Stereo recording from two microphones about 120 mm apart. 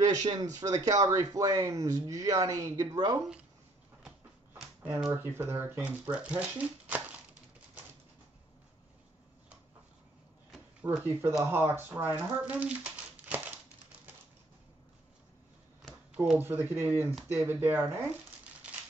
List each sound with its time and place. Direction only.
0.0 s speech: 35° right (ahead or behind)
5.0 s speech: 20° right (ahead or behind)
10.8 s speech: 15° right (ahead or behind)
16.3 s speech: 20° right (ahead or behind)